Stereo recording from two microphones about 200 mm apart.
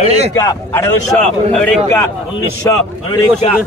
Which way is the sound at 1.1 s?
5° left (ahead or behind).